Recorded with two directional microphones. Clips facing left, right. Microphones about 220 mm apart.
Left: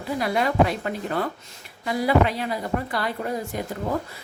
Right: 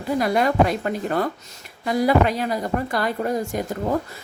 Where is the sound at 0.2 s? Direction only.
45° right (ahead or behind).